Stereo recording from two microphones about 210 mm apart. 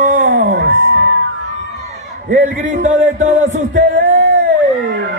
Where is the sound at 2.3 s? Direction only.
40° right (ahead or behind).